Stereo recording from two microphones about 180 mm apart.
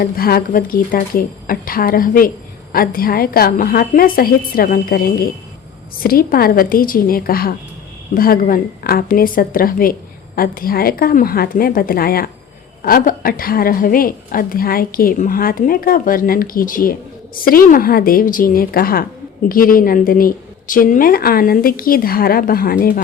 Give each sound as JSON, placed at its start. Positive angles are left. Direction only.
{"t": 0.0, "sound": "a woman's voice", "side_deg": 55}